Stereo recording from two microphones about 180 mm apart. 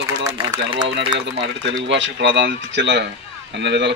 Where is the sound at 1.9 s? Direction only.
85° right.